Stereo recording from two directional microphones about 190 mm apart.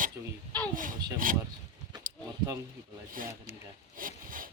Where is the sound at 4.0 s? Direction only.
45° right (ahead or behind).